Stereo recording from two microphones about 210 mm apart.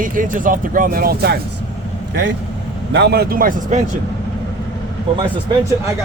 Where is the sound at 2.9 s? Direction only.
55° right (ahead or behind).